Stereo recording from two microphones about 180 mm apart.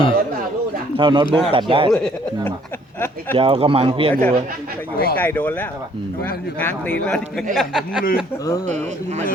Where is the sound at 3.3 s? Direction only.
30° right (ahead or behind).